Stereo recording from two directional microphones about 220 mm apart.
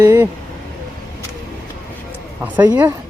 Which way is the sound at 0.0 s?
15° right (ahead or behind).